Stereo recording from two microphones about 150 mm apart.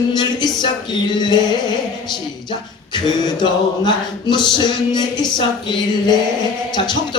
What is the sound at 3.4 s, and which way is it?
Music, 30° left (ahead or behind).